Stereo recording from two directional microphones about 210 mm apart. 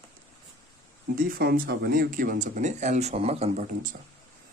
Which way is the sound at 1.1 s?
45° right (ahead or behind).